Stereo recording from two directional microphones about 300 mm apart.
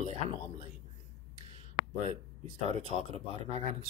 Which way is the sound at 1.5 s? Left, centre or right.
Right.